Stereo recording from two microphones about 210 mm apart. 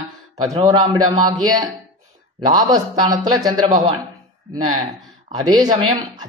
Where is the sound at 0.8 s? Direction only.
20° right (ahead or behind).